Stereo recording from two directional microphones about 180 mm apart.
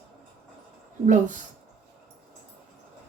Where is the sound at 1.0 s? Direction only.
45° right (ahead or behind).